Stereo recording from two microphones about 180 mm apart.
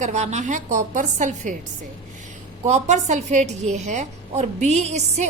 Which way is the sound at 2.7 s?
40° right (ahead or behind).